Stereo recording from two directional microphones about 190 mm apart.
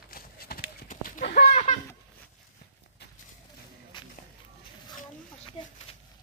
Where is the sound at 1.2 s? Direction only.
50° left (ahead or behind).